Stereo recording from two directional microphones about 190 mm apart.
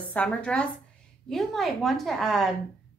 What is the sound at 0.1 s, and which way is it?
A woman's voice, 5° left (ahead or behind).